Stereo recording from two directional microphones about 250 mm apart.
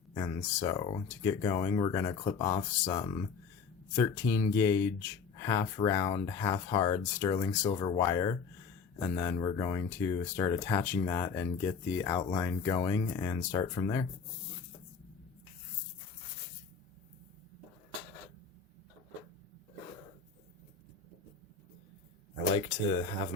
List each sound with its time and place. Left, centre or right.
0.1 s speech: centre
22.5 s speech: left